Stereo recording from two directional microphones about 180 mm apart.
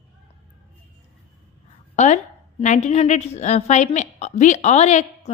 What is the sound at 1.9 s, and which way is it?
A woman's voice, 40° left (ahead or behind).